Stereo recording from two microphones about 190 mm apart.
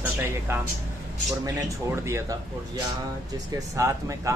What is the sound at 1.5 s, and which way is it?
Speech, 15° right (ahead or behind).